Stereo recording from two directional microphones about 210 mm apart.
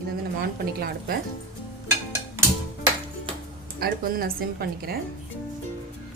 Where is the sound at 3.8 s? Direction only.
45° right (ahead or behind).